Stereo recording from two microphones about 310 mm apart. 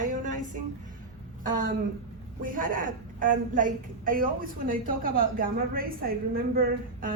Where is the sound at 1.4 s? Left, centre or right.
Right.